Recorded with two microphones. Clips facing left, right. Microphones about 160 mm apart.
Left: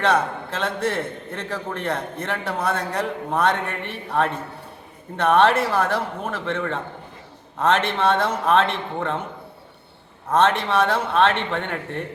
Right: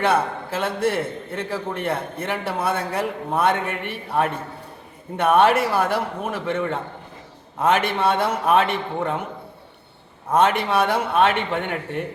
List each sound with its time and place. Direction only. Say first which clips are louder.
0.0 s a man's voice: even; 10° right (ahead or behind)
10.3 s a man's voice: even; 10° right (ahead or behind)